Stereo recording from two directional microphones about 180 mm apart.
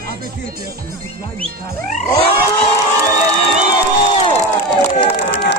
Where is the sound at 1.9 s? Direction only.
30° left (ahead or behind).